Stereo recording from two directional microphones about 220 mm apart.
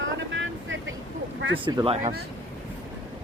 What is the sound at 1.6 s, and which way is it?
Speech, 20° right (ahead or behind).